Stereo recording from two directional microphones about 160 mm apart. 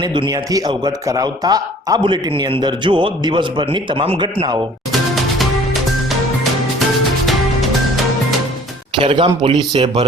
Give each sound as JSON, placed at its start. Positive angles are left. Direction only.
{"t": 0.0, "sound": "speech", "side_deg": -30}
{"t": 4.9, "sound": "music", "side_deg": 0}
{"t": 9.0, "sound": "speech", "side_deg": -30}